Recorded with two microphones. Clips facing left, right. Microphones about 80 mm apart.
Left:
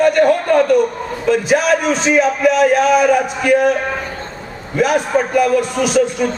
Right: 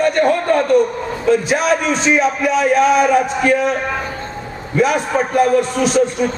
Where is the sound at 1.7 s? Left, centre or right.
Left.